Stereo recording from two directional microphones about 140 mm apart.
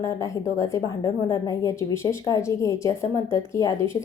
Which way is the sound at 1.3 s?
20° left (ahead or behind).